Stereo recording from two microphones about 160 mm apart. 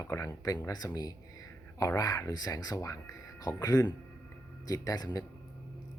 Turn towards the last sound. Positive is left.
turn(degrees=25)  # may be behind; listen again after turning